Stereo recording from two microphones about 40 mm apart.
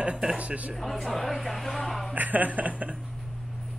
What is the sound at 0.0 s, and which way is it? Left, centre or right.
Speech, right.